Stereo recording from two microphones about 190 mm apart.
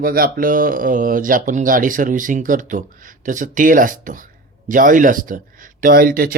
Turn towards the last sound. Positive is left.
turn(degrees=-50)  # may be behind; listen again after turning